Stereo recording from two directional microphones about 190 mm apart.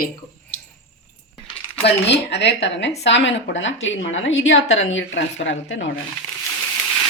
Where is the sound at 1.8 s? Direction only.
65° left (ahead or behind).